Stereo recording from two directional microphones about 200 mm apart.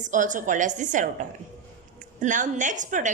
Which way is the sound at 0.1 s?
40° right (ahead or behind).